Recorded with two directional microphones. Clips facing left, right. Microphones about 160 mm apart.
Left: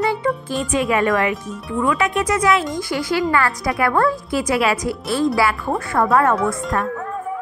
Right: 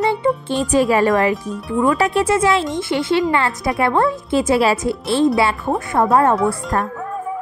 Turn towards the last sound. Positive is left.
turn(degrees=-35)  # may be behind; listen again after turning